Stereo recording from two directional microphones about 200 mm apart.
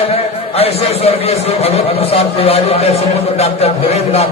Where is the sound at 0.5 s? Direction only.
30° left (ahead or behind).